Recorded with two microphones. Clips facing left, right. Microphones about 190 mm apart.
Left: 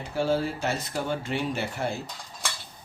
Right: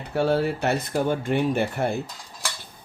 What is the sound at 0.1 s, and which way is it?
Speech, 60° right (ahead or behind).